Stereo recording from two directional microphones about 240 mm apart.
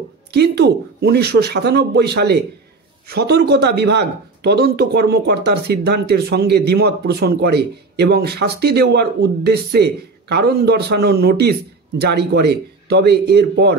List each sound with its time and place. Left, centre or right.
0.3 s speech: right